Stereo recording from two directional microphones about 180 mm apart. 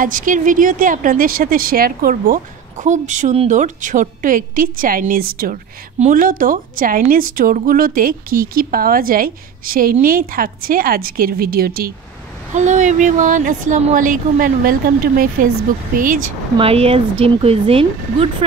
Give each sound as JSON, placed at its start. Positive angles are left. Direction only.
{"t": 0.0, "sound": "a woman's voice", "side_deg": -50}
{"t": 12.5, "sound": "a woman's voice", "side_deg": -40}
{"t": 16.5, "sound": "speech", "side_deg": -30}